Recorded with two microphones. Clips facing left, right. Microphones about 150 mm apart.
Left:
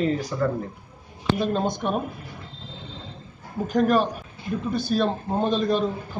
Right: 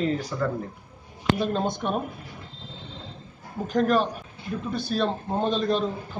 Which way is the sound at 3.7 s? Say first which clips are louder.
Left 2 dB; 5° left (ahead or behind).